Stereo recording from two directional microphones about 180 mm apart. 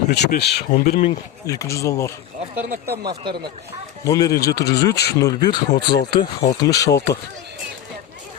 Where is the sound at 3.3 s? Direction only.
60° right (ahead or behind).